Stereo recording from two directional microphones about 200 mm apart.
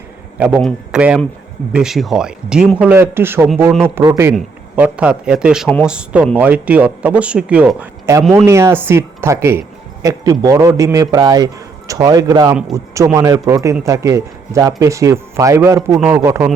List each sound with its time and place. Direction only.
0.3 s a man's voice: 5° right (ahead or behind)